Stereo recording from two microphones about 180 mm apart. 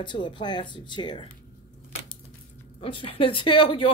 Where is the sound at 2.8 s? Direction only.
30° left (ahead or behind).